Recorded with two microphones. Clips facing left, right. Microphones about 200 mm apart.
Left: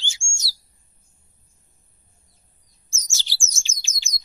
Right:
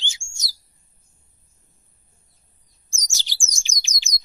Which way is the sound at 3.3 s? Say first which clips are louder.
Even; 15° right (ahead or behind).